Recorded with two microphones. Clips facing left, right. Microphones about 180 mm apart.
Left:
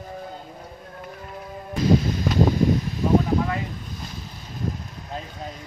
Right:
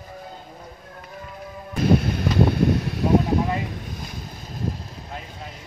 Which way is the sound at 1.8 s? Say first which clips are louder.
Even; 60° right (ahead or behind).